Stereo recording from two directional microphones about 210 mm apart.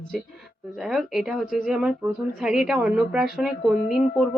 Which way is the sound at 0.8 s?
Centre (ahead or behind).